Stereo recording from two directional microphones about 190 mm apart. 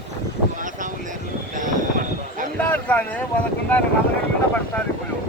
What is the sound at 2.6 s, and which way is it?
Speech, 10° left (ahead or behind).